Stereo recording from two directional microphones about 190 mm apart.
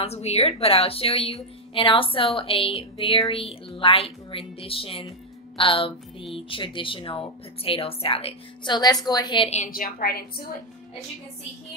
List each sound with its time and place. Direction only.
0.0 s a woman's voice: 35° left (ahead or behind)
9.7 s a woman's voice: 50° left (ahead or behind)